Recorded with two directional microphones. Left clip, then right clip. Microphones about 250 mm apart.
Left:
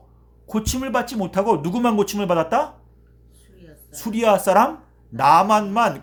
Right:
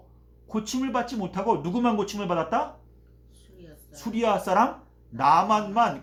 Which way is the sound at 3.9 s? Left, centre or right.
Left.